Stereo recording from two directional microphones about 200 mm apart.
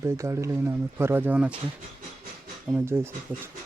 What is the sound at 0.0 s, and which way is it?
Speech, 15° right (ahead or behind).